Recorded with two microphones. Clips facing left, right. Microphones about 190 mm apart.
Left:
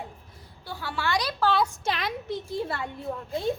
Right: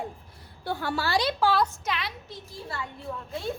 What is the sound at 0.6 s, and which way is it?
Speech, 50° right (ahead or behind).